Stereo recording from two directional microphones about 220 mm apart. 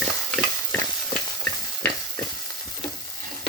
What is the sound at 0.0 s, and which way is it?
Stir, centre (ahead or behind).